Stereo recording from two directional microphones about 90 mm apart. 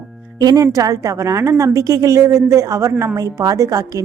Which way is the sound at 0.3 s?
45° right (ahead or behind).